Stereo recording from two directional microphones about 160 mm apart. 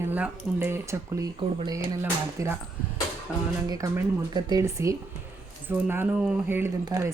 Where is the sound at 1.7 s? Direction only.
20° right (ahead or behind).